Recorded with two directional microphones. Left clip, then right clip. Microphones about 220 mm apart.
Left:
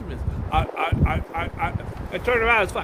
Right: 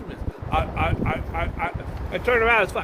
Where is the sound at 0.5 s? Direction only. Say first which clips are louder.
Left 1 dB; 15° left (ahead or behind).